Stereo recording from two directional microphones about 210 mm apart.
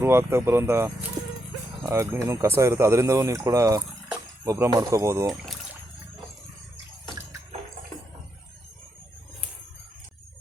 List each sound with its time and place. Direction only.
0.0 s speech: 10° right (ahead or behind)